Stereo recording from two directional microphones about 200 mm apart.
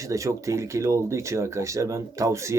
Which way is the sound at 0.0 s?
15° right (ahead or behind).